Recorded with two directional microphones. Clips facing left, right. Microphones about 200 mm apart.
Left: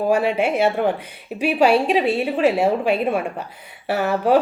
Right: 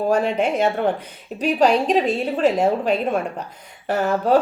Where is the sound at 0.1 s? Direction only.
10° left (ahead or behind).